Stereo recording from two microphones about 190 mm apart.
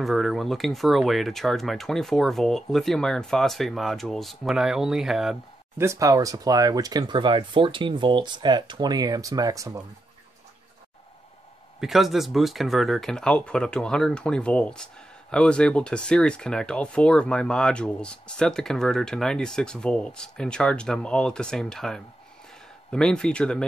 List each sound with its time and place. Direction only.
0.0 s speech: centre (ahead or behind)
5.8 s speech: 15° right (ahead or behind)
11.8 s speech: centre (ahead or behind)